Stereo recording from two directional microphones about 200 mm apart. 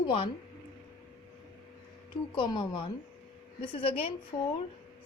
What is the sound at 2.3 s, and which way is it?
A woman's voice, 25° left (ahead or behind).